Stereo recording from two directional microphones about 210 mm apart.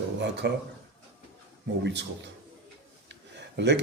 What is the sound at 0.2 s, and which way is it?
Speech, 55° right (ahead or behind).